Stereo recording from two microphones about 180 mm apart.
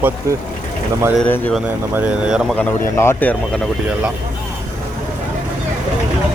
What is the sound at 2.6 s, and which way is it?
A man's voice, 10° left (ahead or behind).